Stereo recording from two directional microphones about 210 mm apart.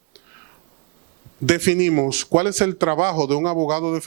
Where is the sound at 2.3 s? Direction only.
25° right (ahead or behind).